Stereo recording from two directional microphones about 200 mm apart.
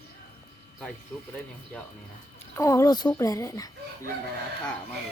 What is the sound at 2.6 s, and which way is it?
Speech, 15° left (ahead or behind).